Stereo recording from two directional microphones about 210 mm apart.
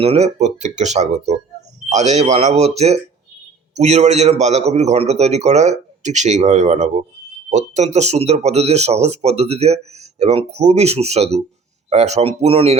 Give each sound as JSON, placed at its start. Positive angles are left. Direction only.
{"t": 0.0, "sound": "speech", "side_deg": -30}